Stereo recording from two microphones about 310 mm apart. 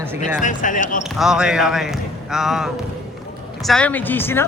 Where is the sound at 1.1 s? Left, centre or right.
Centre.